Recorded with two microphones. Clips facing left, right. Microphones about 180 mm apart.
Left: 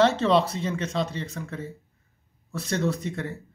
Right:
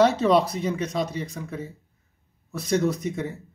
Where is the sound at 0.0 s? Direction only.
15° right (ahead or behind).